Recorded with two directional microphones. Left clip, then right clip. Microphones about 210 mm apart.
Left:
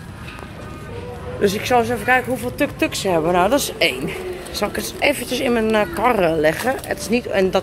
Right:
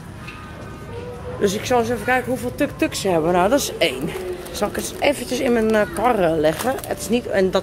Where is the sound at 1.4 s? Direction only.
10° right (ahead or behind).